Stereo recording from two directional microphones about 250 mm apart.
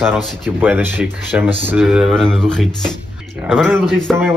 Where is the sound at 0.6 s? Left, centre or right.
Centre.